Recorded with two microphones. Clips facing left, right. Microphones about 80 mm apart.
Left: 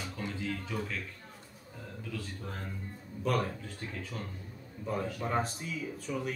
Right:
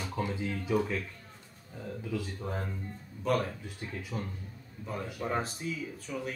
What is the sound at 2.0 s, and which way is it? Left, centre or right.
Speech, centre.